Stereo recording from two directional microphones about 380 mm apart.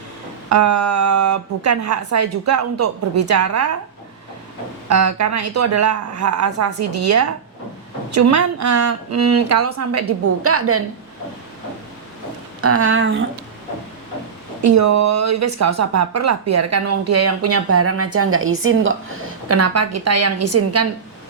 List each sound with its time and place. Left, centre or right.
0.5 s speech: right
4.9 s speech: right
12.6 s speech: right
14.6 s speech: right